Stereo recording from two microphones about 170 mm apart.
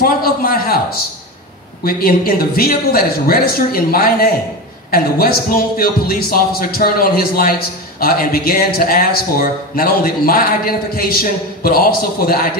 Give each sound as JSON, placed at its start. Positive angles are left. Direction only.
{"t": 0.0, "sound": "a man's voice", "side_deg": 60}